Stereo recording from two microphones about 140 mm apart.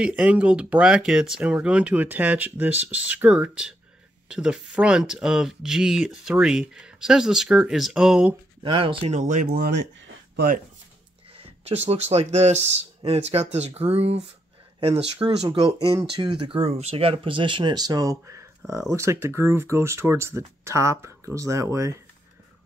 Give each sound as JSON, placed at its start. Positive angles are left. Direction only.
{"t": 0.0, "sound": "speech", "side_deg": -10}
{"t": 8.6, "sound": "speech", "side_deg": -40}
{"t": 9.1, "sound": "speech", "side_deg": -65}
{"t": 11.3, "sound": "speech", "side_deg": -45}
{"t": 15.9, "sound": "speech", "side_deg": -30}